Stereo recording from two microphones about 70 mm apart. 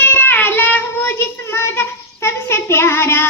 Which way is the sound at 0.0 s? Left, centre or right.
Left.